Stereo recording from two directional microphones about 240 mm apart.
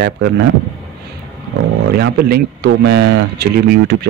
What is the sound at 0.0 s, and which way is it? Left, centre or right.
Speech, right.